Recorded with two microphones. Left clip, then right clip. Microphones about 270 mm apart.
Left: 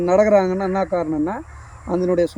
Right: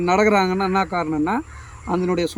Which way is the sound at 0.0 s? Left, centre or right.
Right.